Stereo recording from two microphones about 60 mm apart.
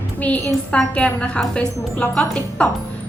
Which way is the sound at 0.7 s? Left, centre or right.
Centre.